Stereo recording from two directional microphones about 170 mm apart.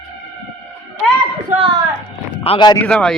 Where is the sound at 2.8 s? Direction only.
5° left (ahead or behind).